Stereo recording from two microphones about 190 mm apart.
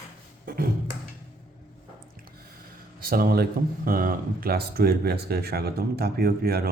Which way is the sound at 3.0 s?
50° right (ahead or behind).